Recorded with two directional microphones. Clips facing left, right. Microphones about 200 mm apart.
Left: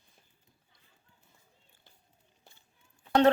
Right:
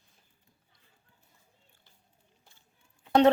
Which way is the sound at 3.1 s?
20° right (ahead or behind).